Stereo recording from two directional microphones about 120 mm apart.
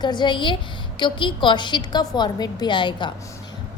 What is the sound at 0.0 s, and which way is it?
A woman's voice, 40° left (ahead or behind).